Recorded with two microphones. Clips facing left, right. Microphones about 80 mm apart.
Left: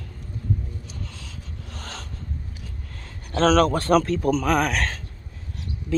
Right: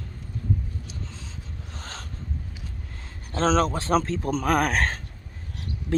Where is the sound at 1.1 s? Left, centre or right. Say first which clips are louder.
Left 1 dB; right.